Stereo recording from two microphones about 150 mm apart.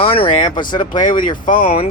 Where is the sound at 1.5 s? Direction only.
65° left (ahead or behind).